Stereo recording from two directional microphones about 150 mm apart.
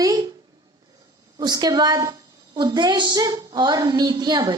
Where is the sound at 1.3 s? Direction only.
25° right (ahead or behind).